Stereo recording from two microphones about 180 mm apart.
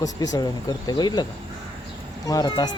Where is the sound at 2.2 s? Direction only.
20° left (ahead or behind).